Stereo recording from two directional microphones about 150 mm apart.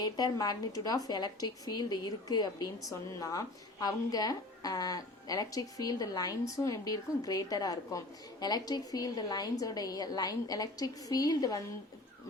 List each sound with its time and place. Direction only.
0.0 s a woman's voice: 25° left (ahead or behind)